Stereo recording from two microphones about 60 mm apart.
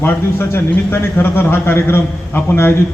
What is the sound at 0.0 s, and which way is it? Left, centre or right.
A man's voice, left.